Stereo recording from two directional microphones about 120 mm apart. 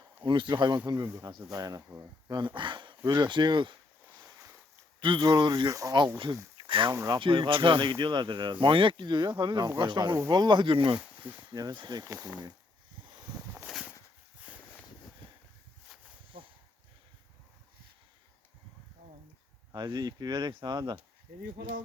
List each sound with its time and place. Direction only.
0.3 s speech: 40° right (ahead or behind)
0.9 s speech: 30° right (ahead or behind)
2.3 s speech: 40° right (ahead or behind)
4.9 s speech: 45° right (ahead or behind)
6.6 s a sound: 45° right (ahead or behind)
7.1 s speech: 45° right (ahead or behind)
12.0 s speech: 30° right (ahead or behind)
13.7 s a sound: centre (ahead or behind)
16.3 s a sound: 45° right (ahead or behind)
19.7 s speech: 35° right (ahead or behind)